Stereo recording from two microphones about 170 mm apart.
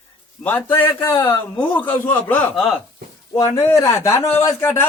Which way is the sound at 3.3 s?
20° left (ahead or behind).